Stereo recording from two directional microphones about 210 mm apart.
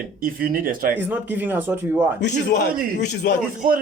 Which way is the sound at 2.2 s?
55° left (ahead or behind).